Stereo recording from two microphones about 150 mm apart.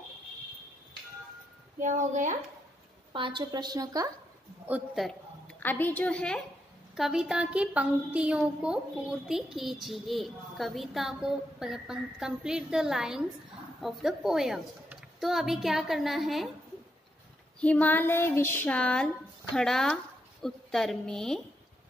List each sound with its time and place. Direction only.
1.8 s a woman's voice: 55° right (ahead or behind)
3.1 s speech: 35° right (ahead or behind)
4.6 s a sound: 5° right (ahead or behind)
5.6 s a child's voice: 10° left (ahead or behind)
17.6 s a child's voice: 10° left (ahead or behind)